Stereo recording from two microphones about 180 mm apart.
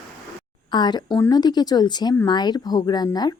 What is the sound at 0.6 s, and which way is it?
Speech, 25° left (ahead or behind).